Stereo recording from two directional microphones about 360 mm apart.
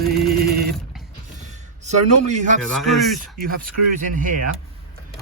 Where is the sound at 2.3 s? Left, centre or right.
Right.